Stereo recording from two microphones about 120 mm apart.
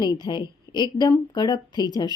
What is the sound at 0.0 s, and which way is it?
Speech, 35° left (ahead or behind).